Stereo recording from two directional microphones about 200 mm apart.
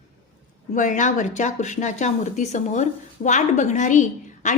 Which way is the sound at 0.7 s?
40° left (ahead or behind).